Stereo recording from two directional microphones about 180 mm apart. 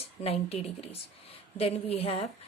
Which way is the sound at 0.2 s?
35° left (ahead or behind).